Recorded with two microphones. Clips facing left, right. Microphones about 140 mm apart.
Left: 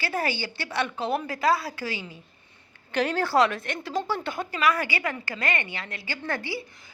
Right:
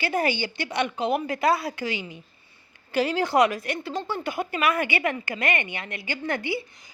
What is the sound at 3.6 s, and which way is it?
Speech, centre (ahead or behind).